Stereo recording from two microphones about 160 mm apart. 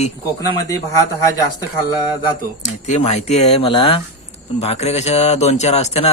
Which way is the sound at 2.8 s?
45° left (ahead or behind).